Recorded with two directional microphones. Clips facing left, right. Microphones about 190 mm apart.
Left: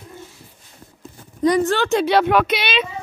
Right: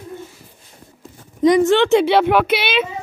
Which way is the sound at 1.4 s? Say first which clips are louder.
Right 4 dB; 20° right (ahead or behind).